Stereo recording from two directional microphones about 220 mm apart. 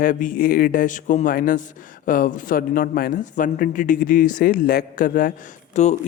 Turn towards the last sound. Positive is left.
turn(degrees=30)  # may be behind; listen again after turning